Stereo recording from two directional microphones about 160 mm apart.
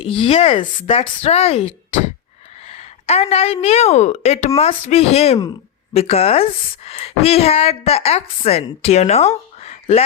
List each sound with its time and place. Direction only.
0.0 s a woman's voice: 35° left (ahead or behind)